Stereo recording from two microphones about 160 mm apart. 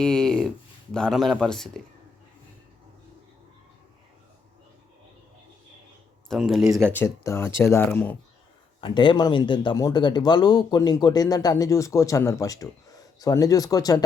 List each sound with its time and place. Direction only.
0.0 s speech: 5° left (ahead or behind)
6.2 s speech: centre (ahead or behind)
6.7 s speech: 20° right (ahead or behind)
6.9 s speech: 15° left (ahead or behind)
8.8 s speech: 30° left (ahead or behind)